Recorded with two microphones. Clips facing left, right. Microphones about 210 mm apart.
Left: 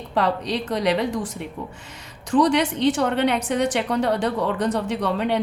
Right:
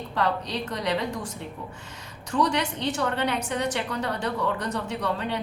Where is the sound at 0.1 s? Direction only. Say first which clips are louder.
Left 5 dB; 75° left (ahead or behind).